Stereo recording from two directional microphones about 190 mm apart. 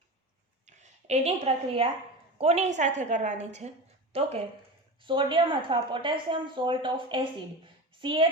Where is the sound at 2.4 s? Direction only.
35° right (ahead or behind).